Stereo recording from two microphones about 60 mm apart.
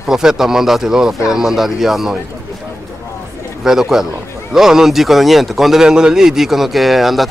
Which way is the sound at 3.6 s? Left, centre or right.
Centre.